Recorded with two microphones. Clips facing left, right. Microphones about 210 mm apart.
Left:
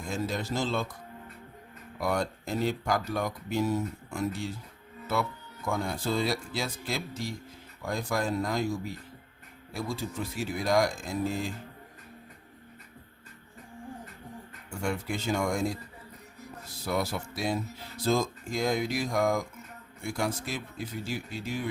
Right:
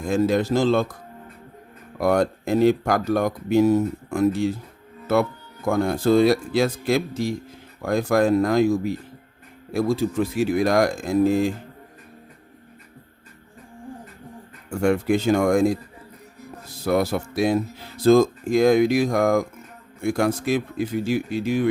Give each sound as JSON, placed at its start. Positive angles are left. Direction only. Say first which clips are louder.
{"t": 0.1, "sound": "speech", "louder": "right 12 dB", "side_deg": -65}
{"t": 2.0, "sound": "speech", "louder": "right 10 dB", "side_deg": -60}
{"t": 3.8, "sound": "speech", "louder": "right 11 dB", "side_deg": -55}
{"t": 5.6, "sound": "speech", "louder": "right 11 dB", "side_deg": -60}
{"t": 14.7, "sound": "speech", "louder": "right 13 dB", "side_deg": -60}
{"t": 16.8, "sound": "speech", "louder": "right 10 dB", "side_deg": -60}
{"t": 19.1, "sound": "speech", "louder": "right 8 dB", "side_deg": -55}